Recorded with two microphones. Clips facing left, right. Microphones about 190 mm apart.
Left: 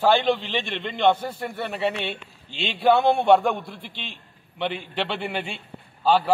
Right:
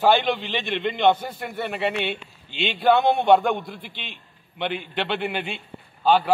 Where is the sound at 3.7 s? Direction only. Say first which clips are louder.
Even; 30° left (ahead or behind).